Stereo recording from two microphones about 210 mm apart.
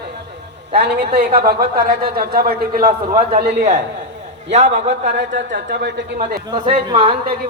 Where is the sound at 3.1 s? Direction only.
35° right (ahead or behind).